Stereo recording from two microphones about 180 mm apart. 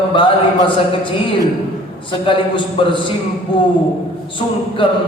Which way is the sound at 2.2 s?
30° left (ahead or behind).